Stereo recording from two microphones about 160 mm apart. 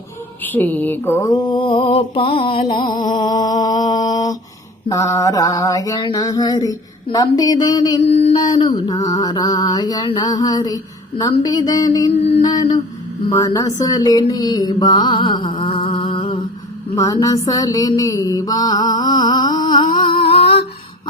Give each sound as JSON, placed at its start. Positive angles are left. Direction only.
{"t": 0.4, "sound": "mantra", "side_deg": 10}
{"t": 8.4, "sound": "a sound", "side_deg": 25}
{"t": 9.1, "sound": "mantra", "side_deg": 25}
{"t": 12.4, "sound": "a sound", "side_deg": 25}
{"t": 13.3, "sound": "mantra", "side_deg": 20}
{"t": 16.9, "sound": "mantra", "side_deg": 20}